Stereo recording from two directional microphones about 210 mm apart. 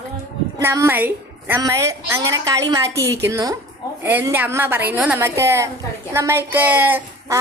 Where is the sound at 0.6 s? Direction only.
10° right (ahead or behind).